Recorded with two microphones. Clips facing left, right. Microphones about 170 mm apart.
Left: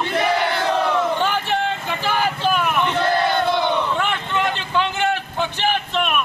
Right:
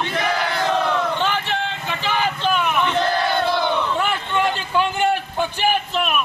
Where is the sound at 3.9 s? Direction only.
10° right (ahead or behind).